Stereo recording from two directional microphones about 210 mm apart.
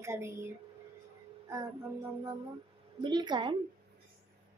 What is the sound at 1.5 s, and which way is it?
Speech, 15° right (ahead or behind).